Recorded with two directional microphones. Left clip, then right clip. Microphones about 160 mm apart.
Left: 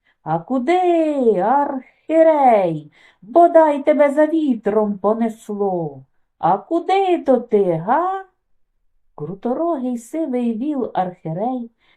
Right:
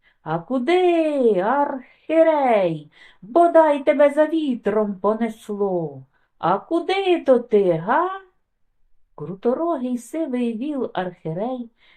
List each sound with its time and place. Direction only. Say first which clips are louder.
0.2 s speech: left 3 dB; 40° left (ahead or behind)
9.1 s speech: even; 35° left (ahead or behind)